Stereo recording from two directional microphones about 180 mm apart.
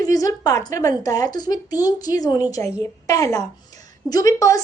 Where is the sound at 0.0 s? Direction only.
20° left (ahead or behind).